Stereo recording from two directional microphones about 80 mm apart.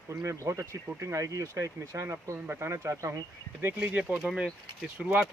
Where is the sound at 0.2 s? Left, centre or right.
Right; by 5.2 s centre.